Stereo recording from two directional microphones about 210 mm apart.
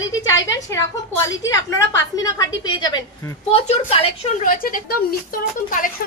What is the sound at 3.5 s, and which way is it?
A woman's voice, 30° left (ahead or behind).